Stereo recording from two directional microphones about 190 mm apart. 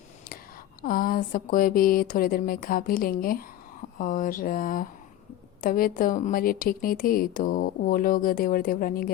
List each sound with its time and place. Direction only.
0.8 s a woman's voice: 50° left (ahead or behind)